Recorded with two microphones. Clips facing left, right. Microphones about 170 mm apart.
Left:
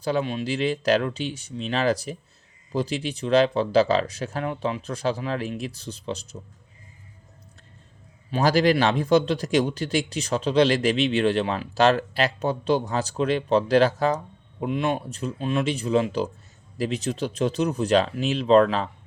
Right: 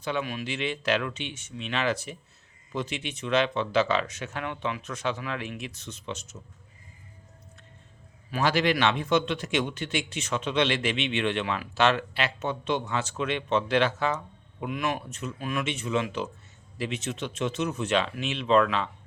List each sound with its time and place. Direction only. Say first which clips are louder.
0.0 s a man's voice: left 6 dB; 35° left (ahead or behind)
8.3 s a man's voice: left 5 dB; 35° left (ahead or behind)